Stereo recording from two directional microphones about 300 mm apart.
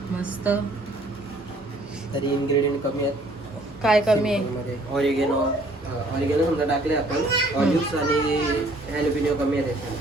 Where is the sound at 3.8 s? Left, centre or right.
Centre.